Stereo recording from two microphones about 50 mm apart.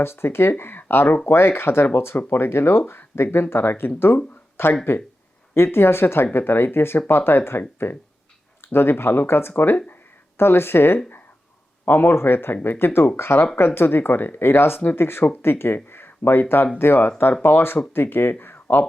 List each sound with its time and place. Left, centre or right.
0.0 s speech: left